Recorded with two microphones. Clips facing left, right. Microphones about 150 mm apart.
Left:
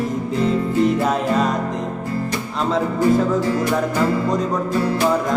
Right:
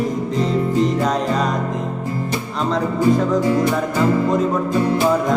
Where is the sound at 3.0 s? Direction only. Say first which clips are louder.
Right 1 dB; 20° right (ahead or behind).